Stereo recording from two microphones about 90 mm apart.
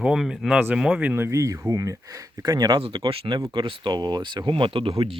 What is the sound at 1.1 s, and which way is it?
Speech, 30° right (ahead or behind).